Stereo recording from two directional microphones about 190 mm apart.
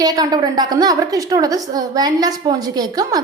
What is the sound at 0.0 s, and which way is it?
A woman's voice, 20° right (ahead or behind).